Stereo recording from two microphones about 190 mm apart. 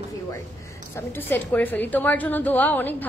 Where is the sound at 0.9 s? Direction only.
10° left (ahead or behind).